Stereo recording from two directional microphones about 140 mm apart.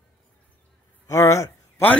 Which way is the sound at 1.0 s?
20° left (ahead or behind).